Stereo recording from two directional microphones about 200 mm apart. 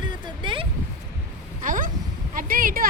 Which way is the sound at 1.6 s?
40° right (ahead or behind).